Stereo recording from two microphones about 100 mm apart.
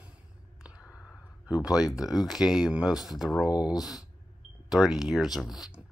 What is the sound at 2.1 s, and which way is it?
Speech, 5° right (ahead or behind).